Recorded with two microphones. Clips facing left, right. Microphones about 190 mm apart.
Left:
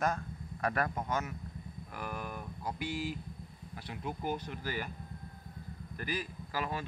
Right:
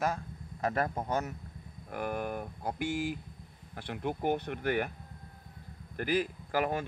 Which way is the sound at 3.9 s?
60° right (ahead or behind).